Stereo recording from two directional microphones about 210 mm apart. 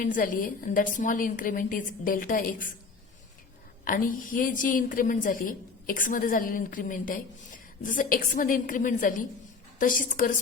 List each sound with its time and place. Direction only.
0.0 s a woman's voice: 40° left (ahead or behind)
3.8 s a woman's voice: 40° left (ahead or behind)